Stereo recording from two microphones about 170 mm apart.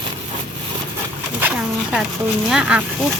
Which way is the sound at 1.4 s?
10° right (ahead or behind).